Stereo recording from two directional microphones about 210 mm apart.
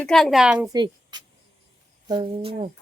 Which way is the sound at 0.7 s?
20° right (ahead or behind).